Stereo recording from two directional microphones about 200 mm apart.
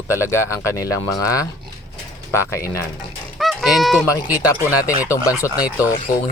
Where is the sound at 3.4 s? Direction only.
Centre (ahead or behind).